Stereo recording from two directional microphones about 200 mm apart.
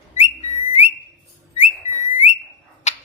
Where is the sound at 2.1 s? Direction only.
35° left (ahead or behind).